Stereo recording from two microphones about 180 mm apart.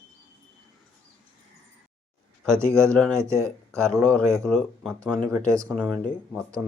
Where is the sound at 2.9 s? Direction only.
5° left (ahead or behind).